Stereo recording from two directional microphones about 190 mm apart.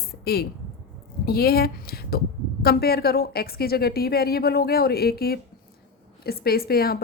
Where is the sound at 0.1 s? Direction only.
55° left (ahead or behind).